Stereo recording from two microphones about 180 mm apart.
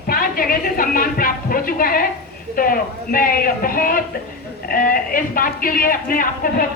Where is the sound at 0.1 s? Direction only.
55° left (ahead or behind).